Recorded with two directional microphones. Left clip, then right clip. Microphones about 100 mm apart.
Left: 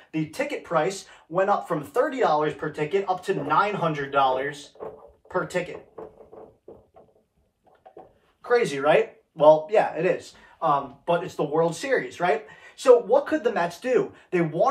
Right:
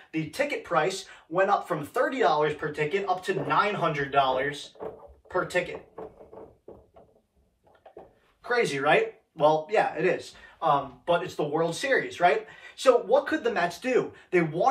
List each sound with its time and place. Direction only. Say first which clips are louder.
0.1 s speech: even; 30° left (ahead or behind)
8.4 s speech: left 4 dB; 35° left (ahead or behind); by 10.1 s 50° left (ahead or behind)
10.6 s speech: left 1 dB; 30° left (ahead or behind)
13.1 s speech: left 2 dB; 45° left (ahead or behind)